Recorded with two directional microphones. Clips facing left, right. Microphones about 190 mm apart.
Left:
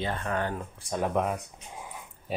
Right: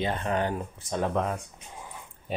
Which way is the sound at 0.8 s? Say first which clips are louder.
Even; 10° left (ahead or behind).